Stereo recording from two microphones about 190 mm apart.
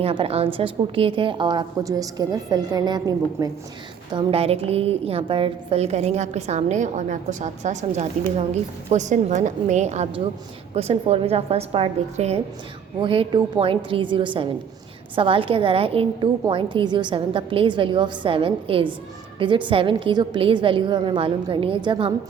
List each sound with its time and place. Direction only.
0.0 s a woman's voice: 30° right (ahead or behind)
4.1 s a woman's voice: 30° right (ahead or behind)